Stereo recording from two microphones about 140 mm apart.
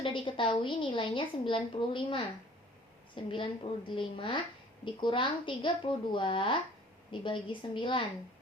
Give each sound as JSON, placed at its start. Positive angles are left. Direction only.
{"t": 0.0, "sound": "a woman's voice", "side_deg": 40}
{"t": 3.3, "sound": "a woman's voice", "side_deg": 35}